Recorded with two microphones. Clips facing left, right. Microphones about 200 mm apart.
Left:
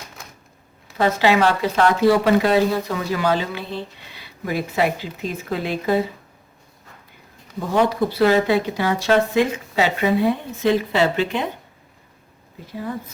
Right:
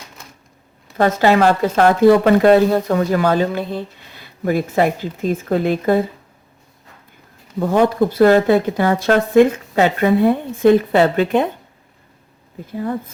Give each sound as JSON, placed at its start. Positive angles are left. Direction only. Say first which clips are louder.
{"t": 0.9, "sound": "speech", "louder": "right 3 dB", "side_deg": -50}
{"t": 7.6, "sound": "speech", "louder": "right 4 dB", "side_deg": -50}
{"t": 12.6, "sound": "speech", "louder": "right 6 dB", "side_deg": -50}